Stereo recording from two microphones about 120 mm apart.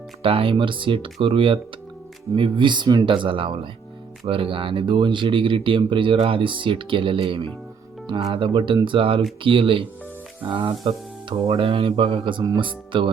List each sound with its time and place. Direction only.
0.2 s speech: 50° right (ahead or behind)